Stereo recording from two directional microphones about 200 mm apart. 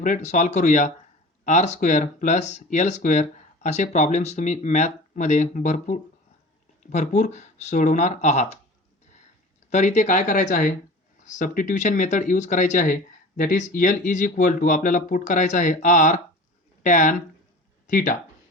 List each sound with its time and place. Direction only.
0.0 s speech: 40° left (ahead or behind)
9.6 s speech: 35° left (ahead or behind)